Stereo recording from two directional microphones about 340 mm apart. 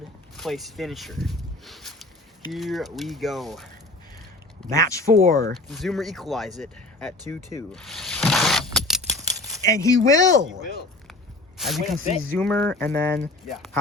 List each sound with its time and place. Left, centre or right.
0.3 s speech: centre
5.1 s speech: right
5.6 s speech: centre
6.6 s a sound: centre
10.1 s speech: centre
11.5 s speech: centre